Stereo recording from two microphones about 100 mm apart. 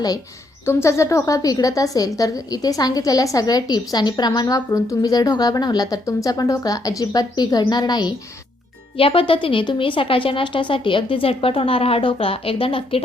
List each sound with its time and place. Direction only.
0.6 s a woman's voice: 25° left (ahead or behind); by 8.1 s 45° left (ahead or behind)
9.0 s a woman's voice: 65° left (ahead or behind)